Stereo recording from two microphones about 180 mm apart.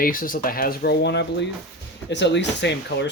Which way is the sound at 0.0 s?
50° left (ahead or behind).